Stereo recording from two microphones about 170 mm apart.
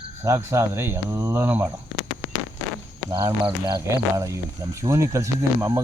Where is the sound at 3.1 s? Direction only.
25° right (ahead or behind).